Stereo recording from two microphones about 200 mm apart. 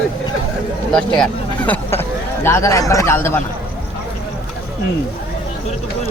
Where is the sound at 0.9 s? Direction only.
5° left (ahead or behind).